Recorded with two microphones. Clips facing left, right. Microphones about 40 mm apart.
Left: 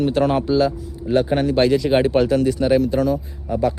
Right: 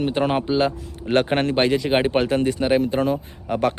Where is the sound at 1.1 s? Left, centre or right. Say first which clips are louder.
Left 1 dB; right.